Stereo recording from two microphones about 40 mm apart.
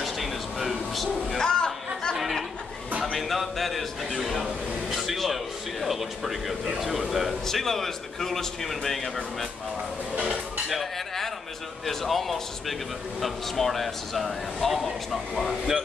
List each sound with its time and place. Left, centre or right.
0.0 s vehicle: centre
1.4 s chatter: centre
2.1 s chatter: centre
3.0 s a man's voice: centre
7.4 s speech: centre
10.7 s music: centre
11.8 s speech: centre